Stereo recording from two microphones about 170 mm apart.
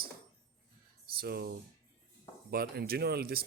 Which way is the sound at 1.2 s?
65° right (ahead or behind).